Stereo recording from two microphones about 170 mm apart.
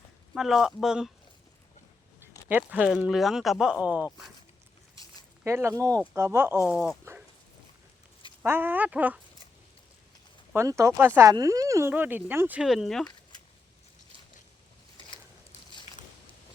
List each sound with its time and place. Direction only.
0.3 s speech: centre (ahead or behind)
2.2 s speech: 10° right (ahead or behind)
5.4 s speech: 15° right (ahead or behind)
7.1 s a sound: 15° right (ahead or behind)
8.4 s speech: 10° right (ahead or behind)
10.5 s speech: 15° right (ahead or behind); by 13.1 s centre (ahead or behind)
15.9 s vehicle: 45° left (ahead or behind)